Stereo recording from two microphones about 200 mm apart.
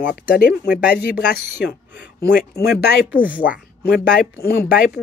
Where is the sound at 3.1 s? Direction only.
10° right (ahead or behind).